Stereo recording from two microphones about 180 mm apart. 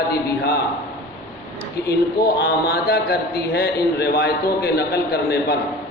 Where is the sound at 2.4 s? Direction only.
60° left (ahead or behind).